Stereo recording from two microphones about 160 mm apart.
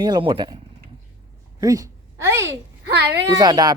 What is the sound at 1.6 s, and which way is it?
Speech, 20° right (ahead or behind).